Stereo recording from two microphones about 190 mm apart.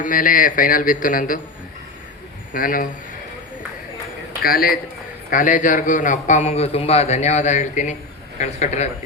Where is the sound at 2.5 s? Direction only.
45° left (ahead or behind).